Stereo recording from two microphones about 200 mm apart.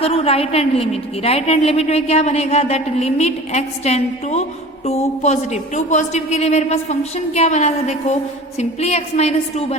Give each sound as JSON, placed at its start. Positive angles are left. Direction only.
{"t": 0.0, "sound": "a woman's voice", "side_deg": 30}